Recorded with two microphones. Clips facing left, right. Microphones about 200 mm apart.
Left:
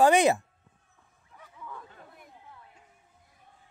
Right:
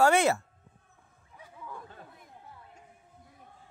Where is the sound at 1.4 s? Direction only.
10° right (ahead or behind).